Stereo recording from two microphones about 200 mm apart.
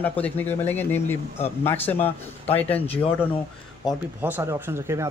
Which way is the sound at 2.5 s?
10° left (ahead or behind).